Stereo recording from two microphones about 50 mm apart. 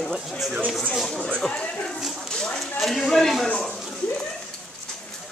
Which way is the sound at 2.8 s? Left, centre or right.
Centre.